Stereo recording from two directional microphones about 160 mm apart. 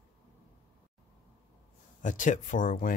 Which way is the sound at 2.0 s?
50° left (ahead or behind).